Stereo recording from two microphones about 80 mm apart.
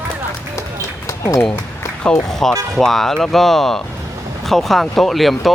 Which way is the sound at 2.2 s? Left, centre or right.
Centre.